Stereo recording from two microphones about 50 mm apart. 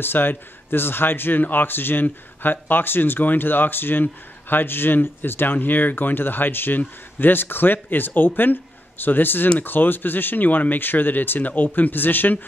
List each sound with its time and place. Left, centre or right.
0.0 s speech: left